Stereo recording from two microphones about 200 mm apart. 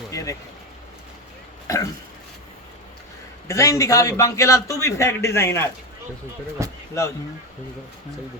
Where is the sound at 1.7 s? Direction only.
15° left (ahead or behind).